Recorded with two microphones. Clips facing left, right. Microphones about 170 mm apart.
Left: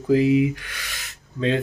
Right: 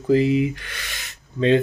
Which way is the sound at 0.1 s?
5° left (ahead or behind).